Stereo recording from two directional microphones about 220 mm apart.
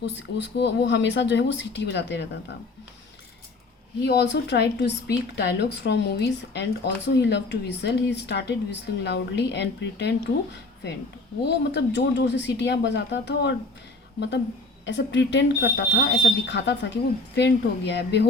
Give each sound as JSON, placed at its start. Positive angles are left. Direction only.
{"t": 0.0, "sound": "speech", "side_deg": 50}
{"t": 4.0, "sound": "speech", "side_deg": 50}
{"t": 11.4, "sound": "speech", "side_deg": 50}